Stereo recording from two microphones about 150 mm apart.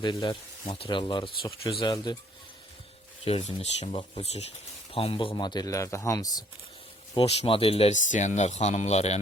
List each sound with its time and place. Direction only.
0.0 s speech: 30° left (ahead or behind)
3.2 s speech: 45° left (ahead or behind); by 6.4 s 25° left (ahead or behind)
7.2 s speech: 40° left (ahead or behind)
7.9 s speech: 55° left (ahead or behind)